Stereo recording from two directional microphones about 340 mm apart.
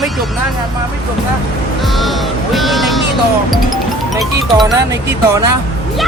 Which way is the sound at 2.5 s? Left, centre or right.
Centre.